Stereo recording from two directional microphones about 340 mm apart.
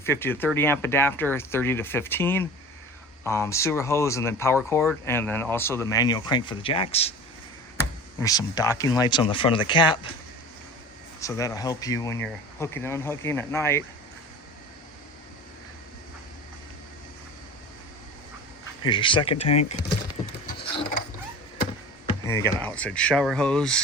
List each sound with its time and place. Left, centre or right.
0.0 s speech: centre
8.2 s speech: centre
11.2 s speech: centre
18.8 s speech: centre
22.3 s speech: centre